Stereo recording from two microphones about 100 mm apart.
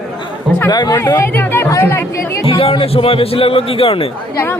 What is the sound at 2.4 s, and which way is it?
A man's voice, 65° left (ahead or behind).